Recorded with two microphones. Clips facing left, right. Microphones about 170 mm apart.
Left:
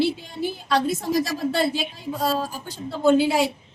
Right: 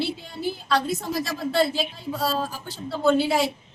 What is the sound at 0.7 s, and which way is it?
Speech, 20° left (ahead or behind).